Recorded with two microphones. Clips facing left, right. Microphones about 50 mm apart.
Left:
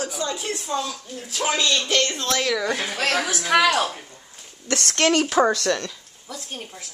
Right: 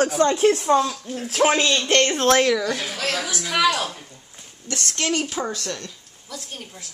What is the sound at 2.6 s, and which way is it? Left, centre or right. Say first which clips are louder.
Speech: left 1 dB; left.